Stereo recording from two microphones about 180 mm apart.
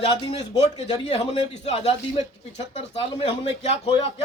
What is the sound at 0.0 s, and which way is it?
Speech, 35° left (ahead or behind).